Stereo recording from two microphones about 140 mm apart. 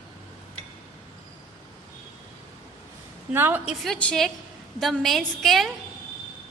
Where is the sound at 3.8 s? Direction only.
5° left (ahead or behind).